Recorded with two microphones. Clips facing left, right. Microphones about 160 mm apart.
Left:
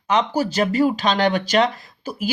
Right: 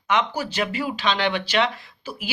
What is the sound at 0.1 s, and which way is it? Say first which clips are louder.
Speech: left 4 dB; 40° left (ahead or behind).